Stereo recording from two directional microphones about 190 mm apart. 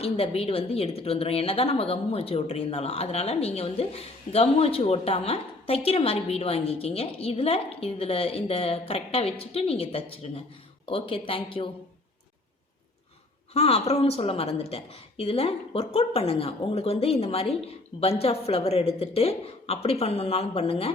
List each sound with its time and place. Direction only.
0.0 s a woman's voice: 30° left (ahead or behind)
13.5 s a woman's voice: 30° left (ahead or behind)